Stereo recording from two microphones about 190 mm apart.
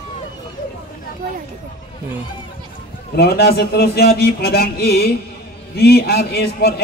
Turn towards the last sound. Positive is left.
turn(degrees=55)  # may be behind; listen again after turning